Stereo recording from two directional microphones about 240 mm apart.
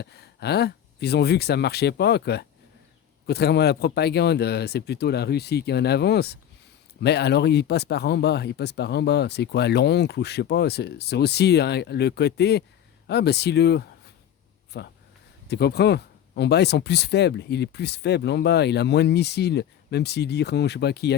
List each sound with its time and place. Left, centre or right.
0.0 s speech: left